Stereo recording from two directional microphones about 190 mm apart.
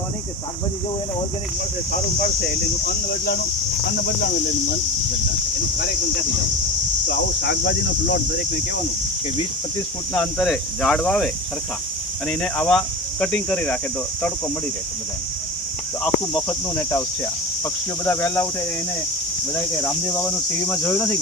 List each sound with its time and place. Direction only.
2.8 s speech: 55° left (ahead or behind)
7.1 s speech: 60° left (ahead or behind)
10.2 s speech: centre (ahead or behind)
12.3 s speech: 5° left (ahead or behind)
16.3 s speech: 10° left (ahead or behind)
18.0 s speech: 10° left (ahead or behind)
19.8 s speech: 15° left (ahead or behind)